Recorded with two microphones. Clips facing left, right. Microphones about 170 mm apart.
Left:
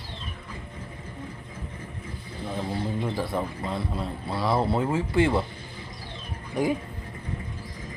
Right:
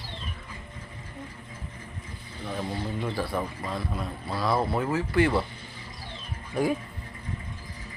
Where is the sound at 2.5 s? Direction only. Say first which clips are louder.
Left 2 dB; 20° left (ahead or behind).